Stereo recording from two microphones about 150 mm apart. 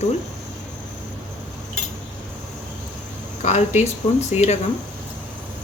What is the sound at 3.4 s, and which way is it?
Speech, 50° left (ahead or behind).